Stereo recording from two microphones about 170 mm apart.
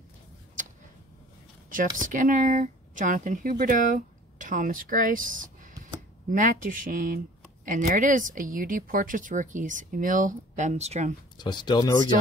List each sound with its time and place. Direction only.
2.0 s speech: 50° right (ahead or behind)
11.3 s speech: 25° left (ahead or behind)